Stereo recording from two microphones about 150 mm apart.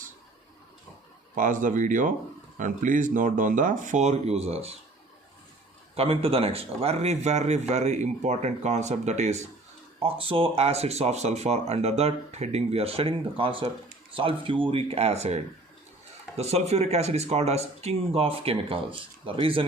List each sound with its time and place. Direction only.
1.4 s speech: 60° right (ahead or behind); by 4.7 s 45° right (ahead or behind)
5.9 s speech: 40° right (ahead or behind)
10.0 s speech: 35° right (ahead or behind)
16.4 s speech: 45° right (ahead or behind)